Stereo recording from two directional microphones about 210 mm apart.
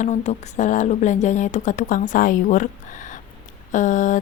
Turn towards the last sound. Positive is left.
turn(degrees=35)  # may be behind; listen again after turning